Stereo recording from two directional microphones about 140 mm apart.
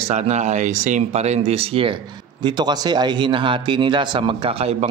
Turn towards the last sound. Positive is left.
turn(degrees=-45)  # may be behind; listen again after turning